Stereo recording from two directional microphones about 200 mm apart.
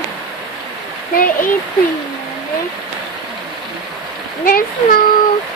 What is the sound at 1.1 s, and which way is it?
Speech, 45° left (ahead or behind).